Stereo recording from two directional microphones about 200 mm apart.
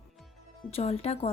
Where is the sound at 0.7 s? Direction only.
30° left (ahead or behind).